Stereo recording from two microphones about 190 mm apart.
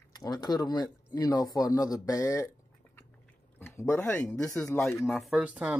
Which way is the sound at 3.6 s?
15° left (ahead or behind).